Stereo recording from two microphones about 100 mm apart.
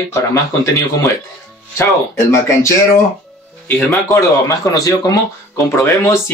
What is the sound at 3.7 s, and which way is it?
Speech, 15° left (ahead or behind).